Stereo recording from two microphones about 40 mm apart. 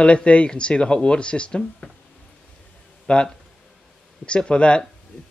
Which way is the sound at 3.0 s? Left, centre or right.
Left.